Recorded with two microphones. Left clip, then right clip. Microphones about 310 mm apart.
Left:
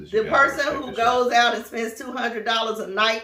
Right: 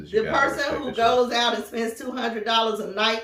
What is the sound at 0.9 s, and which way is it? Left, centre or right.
Speech, centre.